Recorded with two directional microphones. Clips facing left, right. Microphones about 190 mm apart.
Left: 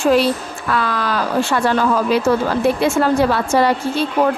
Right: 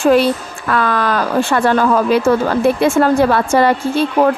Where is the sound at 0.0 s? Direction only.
55° right (ahead or behind).